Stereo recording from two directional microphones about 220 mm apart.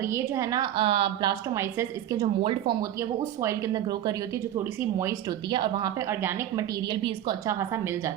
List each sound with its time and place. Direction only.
0.0 s a woman's voice: 10° right (ahead or behind)
2.4 s a woman's voice: 25° right (ahead or behind)